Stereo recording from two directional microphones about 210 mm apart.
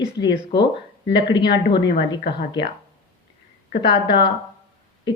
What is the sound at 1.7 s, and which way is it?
Speech, 55° left (ahead or behind).